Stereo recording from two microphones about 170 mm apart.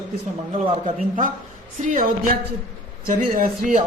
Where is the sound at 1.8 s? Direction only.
55° right (ahead or behind).